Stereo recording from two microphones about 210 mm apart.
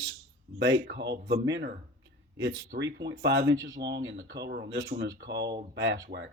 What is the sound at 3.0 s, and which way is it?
Speech, 55° right (ahead or behind).